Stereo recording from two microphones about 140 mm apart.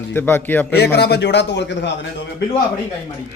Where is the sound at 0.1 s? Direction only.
15° left (ahead or behind).